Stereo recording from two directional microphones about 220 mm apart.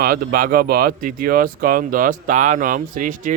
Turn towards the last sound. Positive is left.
turn(degrees=-40)  # may be behind; listen again after turning